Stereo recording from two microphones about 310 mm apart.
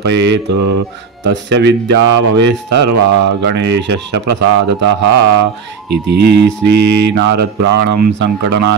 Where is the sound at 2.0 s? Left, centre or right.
Right.